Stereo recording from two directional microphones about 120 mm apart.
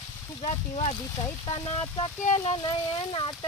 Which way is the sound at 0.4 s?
90° left.